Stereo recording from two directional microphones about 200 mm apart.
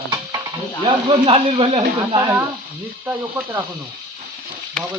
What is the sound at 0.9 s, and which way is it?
A man's voice, 30° right (ahead or behind).